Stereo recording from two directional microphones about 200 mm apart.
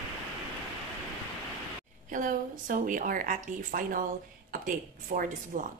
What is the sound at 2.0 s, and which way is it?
A woman's voice, 40° right (ahead or behind).